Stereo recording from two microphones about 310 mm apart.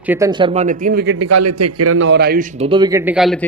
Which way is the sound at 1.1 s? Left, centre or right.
Right.